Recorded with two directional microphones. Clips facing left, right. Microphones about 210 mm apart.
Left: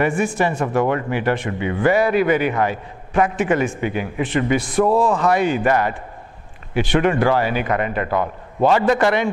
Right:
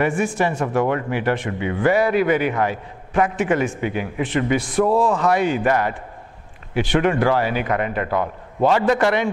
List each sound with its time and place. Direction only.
0.0 s speech: 15° left (ahead or behind)